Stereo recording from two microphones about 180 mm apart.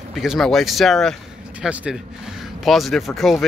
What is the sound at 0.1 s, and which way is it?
Speech, centre (ahead or behind).